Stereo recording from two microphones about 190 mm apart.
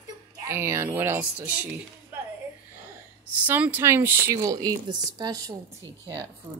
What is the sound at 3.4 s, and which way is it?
Speech, 10° right (ahead or behind).